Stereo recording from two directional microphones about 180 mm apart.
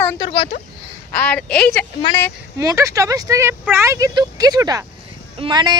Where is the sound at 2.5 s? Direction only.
15° right (ahead or behind).